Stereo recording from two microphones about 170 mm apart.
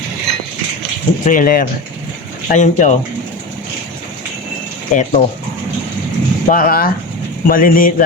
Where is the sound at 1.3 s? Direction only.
55° left (ahead or behind).